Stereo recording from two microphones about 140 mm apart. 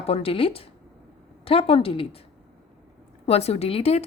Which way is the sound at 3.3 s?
50° left (ahead or behind).